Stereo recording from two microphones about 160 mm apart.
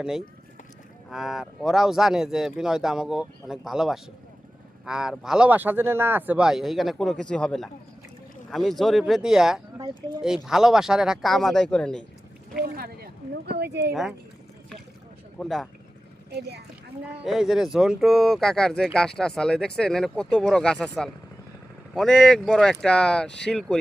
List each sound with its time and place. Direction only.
1.1 s speech: 5° right (ahead or behind)
12.6 s speech: 75° right (ahead or behind); by 13.9 s 90° right
13.9 s speech: centre (ahead or behind)
15.4 s speech: 5° left (ahead or behind)
16.3 s speech: 90° right
17.2 s speech: centre (ahead or behind)